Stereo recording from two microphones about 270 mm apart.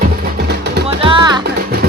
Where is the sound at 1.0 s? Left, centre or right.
Centre.